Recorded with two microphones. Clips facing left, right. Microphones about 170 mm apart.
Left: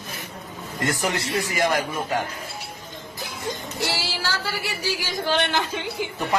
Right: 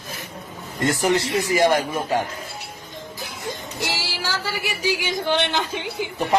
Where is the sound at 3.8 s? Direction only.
15° right (ahead or behind).